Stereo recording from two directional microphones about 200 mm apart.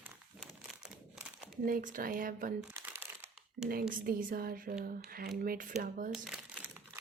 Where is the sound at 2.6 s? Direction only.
10° right (ahead or behind).